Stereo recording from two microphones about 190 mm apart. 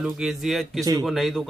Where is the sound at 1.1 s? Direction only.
Centre (ahead or behind).